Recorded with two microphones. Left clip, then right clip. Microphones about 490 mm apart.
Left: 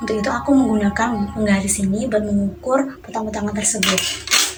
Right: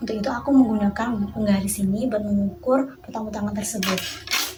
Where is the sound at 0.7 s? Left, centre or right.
Right.